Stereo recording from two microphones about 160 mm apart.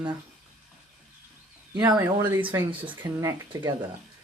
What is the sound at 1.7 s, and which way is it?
Speech, 25° right (ahead or behind).